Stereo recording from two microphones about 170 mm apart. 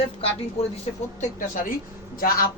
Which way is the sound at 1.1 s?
50° left (ahead or behind).